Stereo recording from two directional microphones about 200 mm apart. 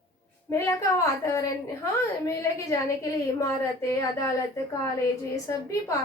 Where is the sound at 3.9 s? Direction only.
15° left (ahead or behind).